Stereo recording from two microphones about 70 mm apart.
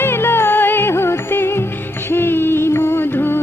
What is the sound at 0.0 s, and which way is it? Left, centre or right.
Music, left.